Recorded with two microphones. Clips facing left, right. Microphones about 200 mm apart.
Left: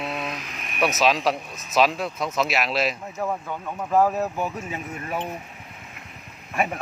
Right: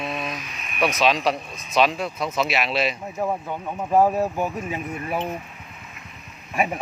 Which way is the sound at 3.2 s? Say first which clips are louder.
Right 2 dB; 15° right (ahead or behind).